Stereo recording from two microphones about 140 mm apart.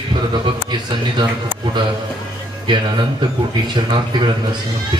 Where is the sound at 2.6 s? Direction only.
35° right (ahead or behind).